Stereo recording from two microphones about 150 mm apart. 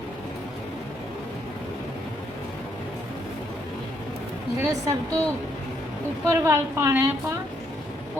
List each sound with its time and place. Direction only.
4.6 s a woman's voice: 20° right (ahead or behind)
6.2 s a woman's voice: 15° right (ahead or behind)